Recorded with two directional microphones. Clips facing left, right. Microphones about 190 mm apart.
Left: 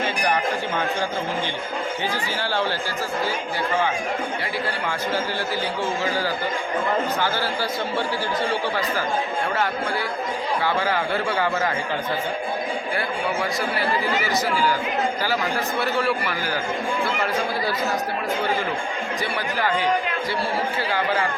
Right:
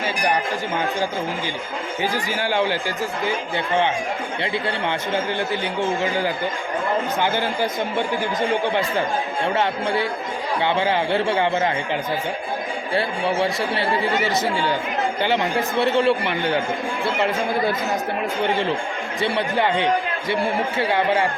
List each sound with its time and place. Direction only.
2.4 s speech: 15° right (ahead or behind)
5.8 s speech: 20° right (ahead or behind)
12.9 s speech: 30° right (ahead or behind)
19.2 s speech: 25° right (ahead or behind)